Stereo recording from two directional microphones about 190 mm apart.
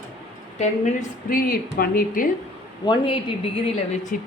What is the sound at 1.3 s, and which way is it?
Speech, 50° left (ahead or behind).